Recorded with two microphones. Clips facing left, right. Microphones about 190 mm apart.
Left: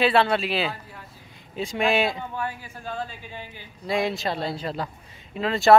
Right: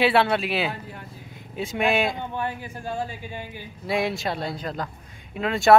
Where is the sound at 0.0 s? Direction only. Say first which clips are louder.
Even; 5° right (ahead or behind).